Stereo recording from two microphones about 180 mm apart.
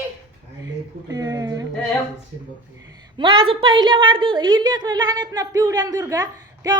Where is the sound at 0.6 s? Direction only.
20° right (ahead or behind).